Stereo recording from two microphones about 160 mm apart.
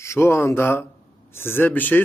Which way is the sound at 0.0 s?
15° left (ahead or behind).